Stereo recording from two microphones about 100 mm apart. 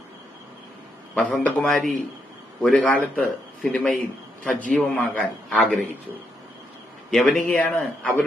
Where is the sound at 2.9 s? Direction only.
15° left (ahead or behind).